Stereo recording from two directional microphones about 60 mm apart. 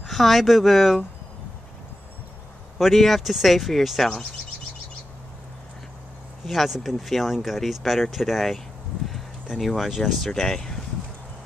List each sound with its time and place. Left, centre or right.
0.0 s speech: centre
2.8 s speech: centre
6.4 s speech: centre
9.6 s speech: centre